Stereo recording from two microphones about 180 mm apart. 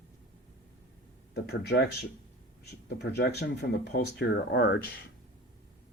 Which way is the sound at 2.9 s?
65° left (ahead or behind).